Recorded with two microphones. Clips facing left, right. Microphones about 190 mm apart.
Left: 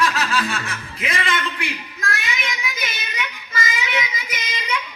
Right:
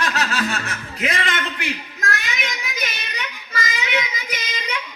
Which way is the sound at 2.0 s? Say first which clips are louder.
Left 1 dB; 35° right (ahead or behind).